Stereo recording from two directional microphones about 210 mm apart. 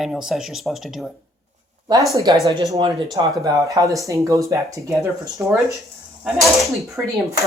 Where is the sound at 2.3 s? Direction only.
20° right (ahead or behind).